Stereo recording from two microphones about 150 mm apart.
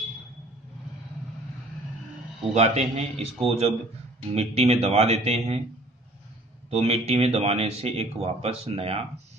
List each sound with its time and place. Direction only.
2.5 s speech: 45° right (ahead or behind)
6.7 s speech: 45° right (ahead or behind)